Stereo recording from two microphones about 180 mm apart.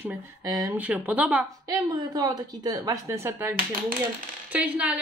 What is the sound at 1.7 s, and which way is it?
A woman's voice, 20° right (ahead or behind).